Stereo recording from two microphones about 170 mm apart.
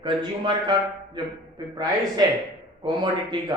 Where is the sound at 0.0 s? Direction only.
25° right (ahead or behind).